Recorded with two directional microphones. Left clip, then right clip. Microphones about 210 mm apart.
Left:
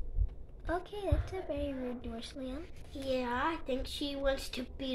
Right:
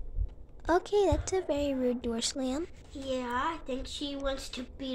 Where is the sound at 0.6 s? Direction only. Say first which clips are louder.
Right 10 dB; 60° right (ahead or behind).